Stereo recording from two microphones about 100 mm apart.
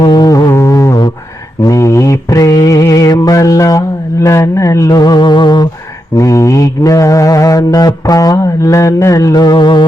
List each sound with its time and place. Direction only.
0.0 s music: 45° left (ahead or behind); by 0.9 s 30° left (ahead or behind)
1.6 s mantra: 30° left (ahead or behind); by 5.6 s 50° left (ahead or behind)
6.1 s mantra: 30° left (ahead or behind); by 9.8 s 50° left (ahead or behind)